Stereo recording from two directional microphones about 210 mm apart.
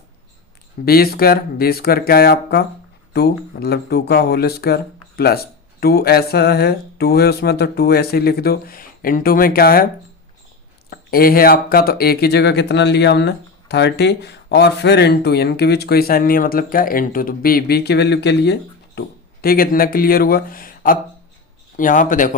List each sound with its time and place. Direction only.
0.9 s speech: 45° left (ahead or behind)